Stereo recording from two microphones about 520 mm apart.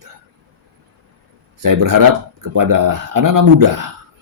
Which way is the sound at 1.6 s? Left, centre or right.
Right.